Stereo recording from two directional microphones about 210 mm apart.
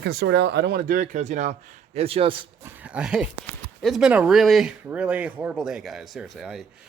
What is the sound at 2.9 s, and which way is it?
A man's voice, 5° right (ahead or behind).